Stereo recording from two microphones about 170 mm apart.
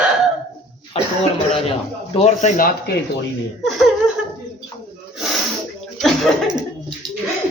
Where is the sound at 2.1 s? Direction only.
40° left (ahead or behind).